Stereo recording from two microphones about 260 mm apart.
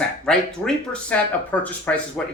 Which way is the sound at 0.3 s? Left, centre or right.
Centre.